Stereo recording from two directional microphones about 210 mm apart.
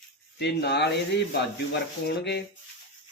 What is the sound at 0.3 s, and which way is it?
Speech, 55° left (ahead or behind).